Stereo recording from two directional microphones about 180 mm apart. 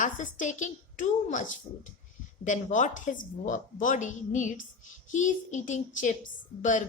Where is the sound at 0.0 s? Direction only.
45° left (ahead or behind).